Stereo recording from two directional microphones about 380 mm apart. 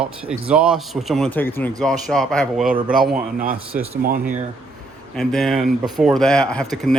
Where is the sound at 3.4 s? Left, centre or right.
Right.